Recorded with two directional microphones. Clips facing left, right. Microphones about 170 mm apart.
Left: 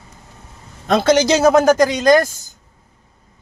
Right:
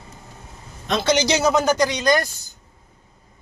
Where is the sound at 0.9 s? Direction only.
50° left (ahead or behind).